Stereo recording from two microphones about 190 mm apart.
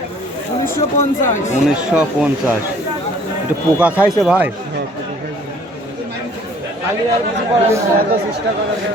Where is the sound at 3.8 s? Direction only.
5° right (ahead or behind).